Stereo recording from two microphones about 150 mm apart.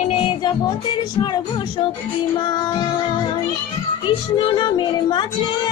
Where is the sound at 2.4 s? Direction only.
30° left (ahead or behind).